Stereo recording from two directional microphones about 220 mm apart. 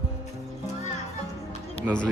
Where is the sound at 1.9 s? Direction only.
5° right (ahead or behind).